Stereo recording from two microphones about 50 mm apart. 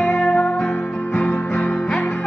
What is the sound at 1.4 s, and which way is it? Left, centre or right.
Music, left.